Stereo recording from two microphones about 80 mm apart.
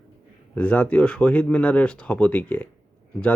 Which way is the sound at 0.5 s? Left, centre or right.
Centre.